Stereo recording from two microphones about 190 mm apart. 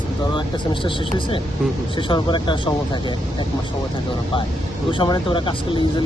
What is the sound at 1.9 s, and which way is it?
Speech, 25° left (ahead or behind).